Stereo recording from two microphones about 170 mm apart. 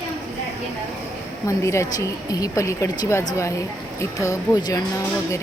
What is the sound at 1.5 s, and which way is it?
A woman's voice, 15° left (ahead or behind).